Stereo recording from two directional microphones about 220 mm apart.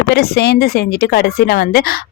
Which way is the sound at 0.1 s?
45° left (ahead or behind).